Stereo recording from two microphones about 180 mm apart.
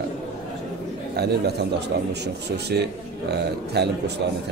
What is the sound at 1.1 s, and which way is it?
Speech, 65° right (ahead or behind).